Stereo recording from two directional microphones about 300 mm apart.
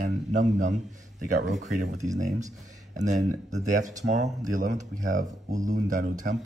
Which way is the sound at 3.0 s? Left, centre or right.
Right.